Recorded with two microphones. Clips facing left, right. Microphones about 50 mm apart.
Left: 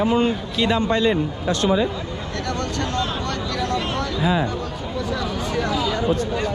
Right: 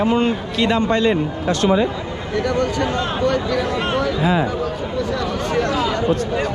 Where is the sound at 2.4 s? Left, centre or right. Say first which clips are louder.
Right 7 dB; centre.